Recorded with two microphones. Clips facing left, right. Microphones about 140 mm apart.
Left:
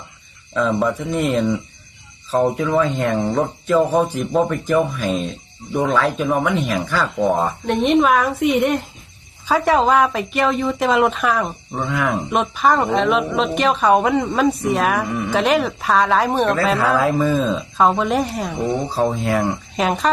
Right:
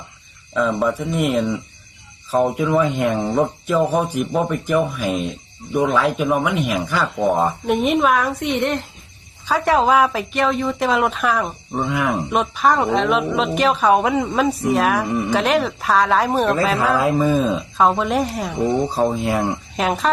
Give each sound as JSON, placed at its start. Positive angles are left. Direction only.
{"t": 0.5, "sound": "a man's voice", "side_deg": 0}
{"t": 11.7, "sound": "speech", "side_deg": -15}
{"t": 12.1, "sound": "speech", "side_deg": 0}
{"t": 15.0, "sound": "speech", "side_deg": -20}
{"t": 15.3, "sound": "speech", "side_deg": 0}
{"t": 17.0, "sound": "a man's voice", "side_deg": -20}
{"t": 17.7, "sound": "speech", "side_deg": 0}
{"t": 18.9, "sound": "speech", "side_deg": -20}
{"t": 19.7, "sound": "speech", "side_deg": 0}